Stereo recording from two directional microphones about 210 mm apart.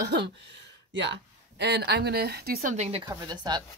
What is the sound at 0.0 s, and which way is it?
Speech, 55° right (ahead or behind).